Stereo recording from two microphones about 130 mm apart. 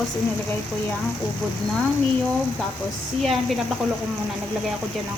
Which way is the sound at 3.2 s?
Centre (ahead or behind).